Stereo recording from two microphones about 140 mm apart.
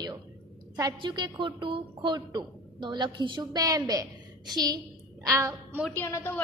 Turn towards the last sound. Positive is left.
turn(degrees=15)  # may be behind; listen again after turning